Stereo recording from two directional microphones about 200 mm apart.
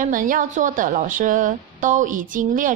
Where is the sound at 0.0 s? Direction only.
40° right (ahead or behind).